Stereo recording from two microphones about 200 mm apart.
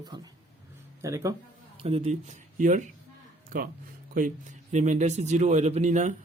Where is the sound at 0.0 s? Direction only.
20° right (ahead or behind).